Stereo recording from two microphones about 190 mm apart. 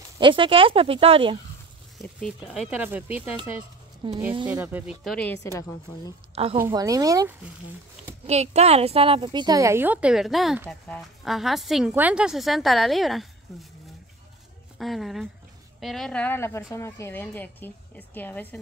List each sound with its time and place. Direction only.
0.2 s speech: 25° right (ahead or behind)
2.0 s speech: centre (ahead or behind)
4.0 s speech: 25° right (ahead or behind)
4.5 s a woman's voice: 10° right (ahead or behind)
5.4 s a woman's voice: 15° left (ahead or behind)
6.3 s a woman's voice: 30° right (ahead or behind)
6.6 s speech: 20° right (ahead or behind)
8.3 s a woman's voice: 35° right (ahead or behind); by 13.7 s centre (ahead or behind)
14.8 s a woman's voice: centre (ahead or behind)